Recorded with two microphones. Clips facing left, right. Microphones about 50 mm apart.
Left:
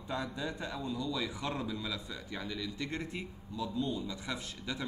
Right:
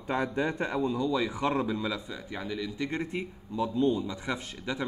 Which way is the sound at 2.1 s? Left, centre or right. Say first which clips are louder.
Right 5 dB; centre.